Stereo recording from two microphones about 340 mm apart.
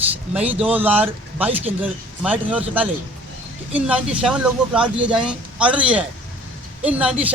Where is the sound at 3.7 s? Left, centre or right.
Centre.